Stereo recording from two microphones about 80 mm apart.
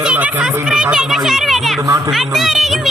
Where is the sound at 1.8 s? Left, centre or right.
Right.